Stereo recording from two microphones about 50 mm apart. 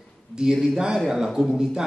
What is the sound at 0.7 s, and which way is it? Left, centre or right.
A man's voice, centre.